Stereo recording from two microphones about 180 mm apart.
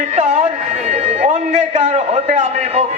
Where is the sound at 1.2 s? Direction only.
40° right (ahead or behind).